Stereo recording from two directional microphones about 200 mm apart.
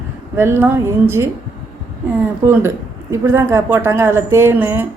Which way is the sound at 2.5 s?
10° right (ahead or behind).